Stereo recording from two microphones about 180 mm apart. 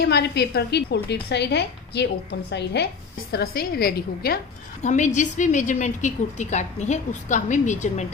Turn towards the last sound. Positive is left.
turn(degrees=40)  # may be behind; listen again after turning